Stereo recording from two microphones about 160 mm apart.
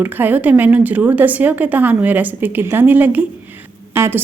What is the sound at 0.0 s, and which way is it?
A woman's voice, 10° right (ahead or behind).